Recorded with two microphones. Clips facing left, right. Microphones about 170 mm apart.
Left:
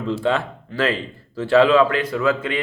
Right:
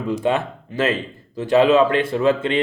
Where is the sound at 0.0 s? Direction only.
15° right (ahead or behind).